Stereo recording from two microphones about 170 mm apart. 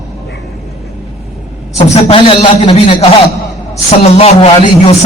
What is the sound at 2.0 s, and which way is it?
A man's voice, 35° left (ahead or behind).